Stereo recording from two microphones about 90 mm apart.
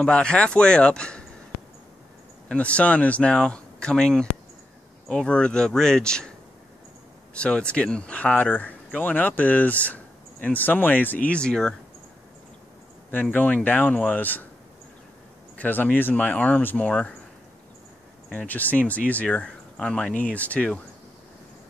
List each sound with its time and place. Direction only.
0.0 s speech: 10° left (ahead or behind)
2.4 s speech: 15° left (ahead or behind)
7.3 s speech: 10° left (ahead or behind)
13.1 s speech: 20° left (ahead or behind)
15.5 s speech: 20° left (ahead or behind)
18.5 s speech: 20° left (ahead or behind)